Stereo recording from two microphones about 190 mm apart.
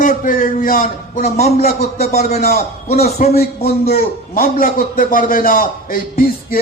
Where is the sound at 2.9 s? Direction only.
55° left (ahead or behind).